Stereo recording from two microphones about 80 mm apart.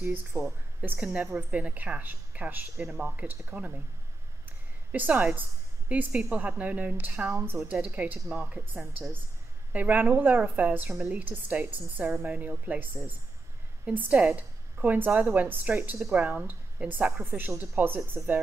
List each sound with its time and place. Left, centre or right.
0.0 s a woman's voice: right
4.5 s a sound: right
5.9 s a woman's voice: centre